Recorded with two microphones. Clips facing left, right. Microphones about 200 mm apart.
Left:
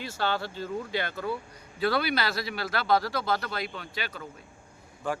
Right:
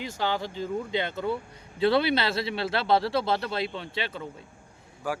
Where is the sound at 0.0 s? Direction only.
15° right (ahead or behind).